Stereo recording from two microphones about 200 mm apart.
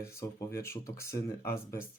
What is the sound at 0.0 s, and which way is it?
Speech, 15° left (ahead or behind).